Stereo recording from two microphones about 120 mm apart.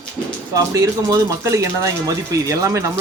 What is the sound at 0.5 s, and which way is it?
Speech, 30° right (ahead or behind).